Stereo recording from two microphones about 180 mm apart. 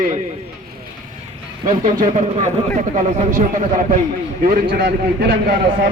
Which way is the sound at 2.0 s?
40° right (ahead or behind).